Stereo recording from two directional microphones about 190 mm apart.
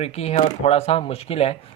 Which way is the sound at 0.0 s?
35° left (ahead or behind).